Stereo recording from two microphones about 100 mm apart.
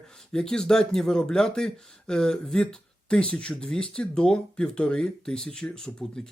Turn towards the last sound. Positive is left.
turn(degrees=5)  # may be behind; listen again after turning